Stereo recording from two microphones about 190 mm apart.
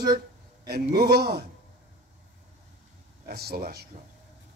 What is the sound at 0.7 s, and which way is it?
Speech, 55° right (ahead or behind).